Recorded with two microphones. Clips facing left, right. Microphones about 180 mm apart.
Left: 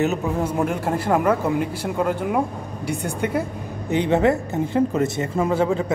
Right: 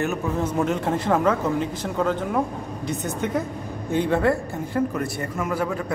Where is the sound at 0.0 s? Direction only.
15° left (ahead or behind).